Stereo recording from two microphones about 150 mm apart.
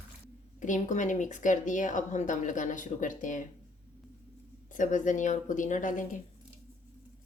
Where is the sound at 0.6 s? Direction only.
55° left (ahead or behind).